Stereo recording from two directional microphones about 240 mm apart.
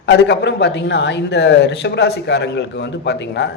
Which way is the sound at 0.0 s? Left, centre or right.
Left.